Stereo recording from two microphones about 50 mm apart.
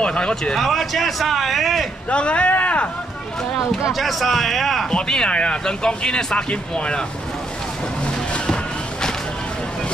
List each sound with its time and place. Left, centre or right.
0.0 s speech: centre
0.6 s a man's voice: centre
2.0 s speech: left
3.9 s a man's voice: centre
4.9 s speech: centre
8.0 s music: left